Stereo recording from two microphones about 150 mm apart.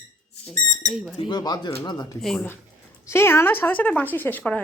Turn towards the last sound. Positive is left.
turn(degrees=10)  # may be behind; listen again after turning